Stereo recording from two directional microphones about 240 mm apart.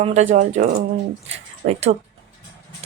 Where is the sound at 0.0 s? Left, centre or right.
Right.